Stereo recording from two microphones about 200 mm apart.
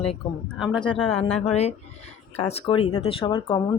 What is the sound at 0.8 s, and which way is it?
Speech, 25° left (ahead or behind).